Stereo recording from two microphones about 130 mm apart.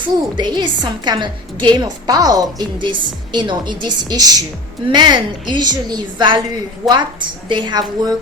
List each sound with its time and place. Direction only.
0.3 s a woman's voice: 35° right (ahead or behind)